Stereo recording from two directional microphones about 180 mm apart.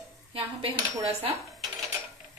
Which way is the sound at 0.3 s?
30° right (ahead or behind).